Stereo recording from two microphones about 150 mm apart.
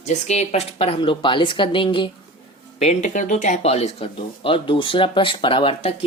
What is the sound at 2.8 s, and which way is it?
Speech, 50° left (ahead or behind).